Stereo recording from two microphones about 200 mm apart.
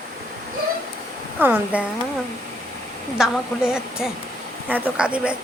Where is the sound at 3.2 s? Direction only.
5° right (ahead or behind).